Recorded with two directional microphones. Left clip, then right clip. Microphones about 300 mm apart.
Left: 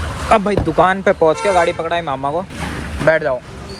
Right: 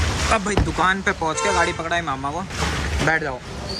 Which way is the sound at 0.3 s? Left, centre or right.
Centre.